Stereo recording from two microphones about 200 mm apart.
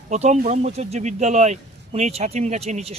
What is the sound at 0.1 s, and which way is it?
Speech, 35° right (ahead or behind).